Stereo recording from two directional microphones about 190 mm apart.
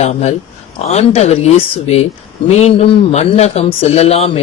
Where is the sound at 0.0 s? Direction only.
35° left (ahead or behind).